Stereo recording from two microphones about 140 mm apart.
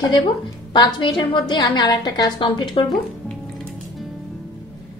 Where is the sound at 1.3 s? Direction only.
35° left (ahead or behind).